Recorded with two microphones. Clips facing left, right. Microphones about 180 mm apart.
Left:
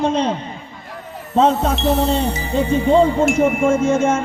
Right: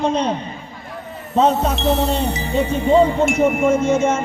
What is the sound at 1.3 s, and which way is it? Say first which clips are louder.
Speech: left 1 dB; 5° right (ahead or behind).